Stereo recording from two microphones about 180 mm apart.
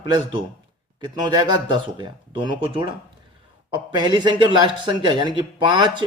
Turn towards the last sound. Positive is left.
turn(degrees=-25)  # may be behind; listen again after turning